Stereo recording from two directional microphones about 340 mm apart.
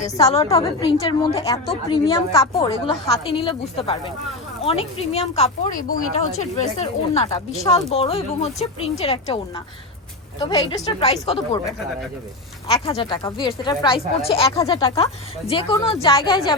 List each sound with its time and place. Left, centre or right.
0.3 s speech: centre
10.4 s speech: centre
12.7 s speech: centre